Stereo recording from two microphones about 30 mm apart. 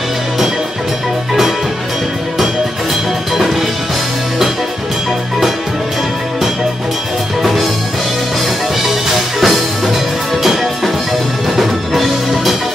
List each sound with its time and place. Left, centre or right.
9.4 s music: centre
11.5 s music: centre